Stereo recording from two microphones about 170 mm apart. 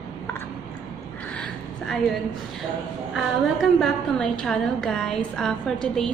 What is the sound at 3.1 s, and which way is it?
A woman's voice, centre (ahead or behind).